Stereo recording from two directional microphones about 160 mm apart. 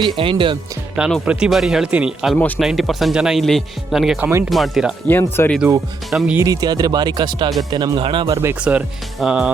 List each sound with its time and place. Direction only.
0.0 s speech: 35° right (ahead or behind)
0.9 s speech: 5° right (ahead or behind)
5.0 s speech: 15° left (ahead or behind)
6.1 s speech: 5° right (ahead or behind)
6.4 s speech: 25° right (ahead or behind)
8.4 s speech: 10° right (ahead or behind)